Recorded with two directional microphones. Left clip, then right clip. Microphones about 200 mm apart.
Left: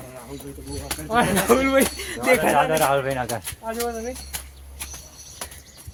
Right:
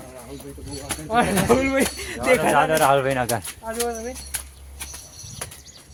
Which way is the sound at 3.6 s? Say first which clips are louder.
Even; 5° right (ahead or behind).